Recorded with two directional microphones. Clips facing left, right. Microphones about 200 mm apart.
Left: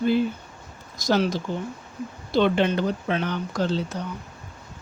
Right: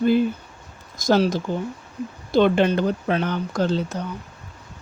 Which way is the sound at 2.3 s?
50° right (ahead or behind).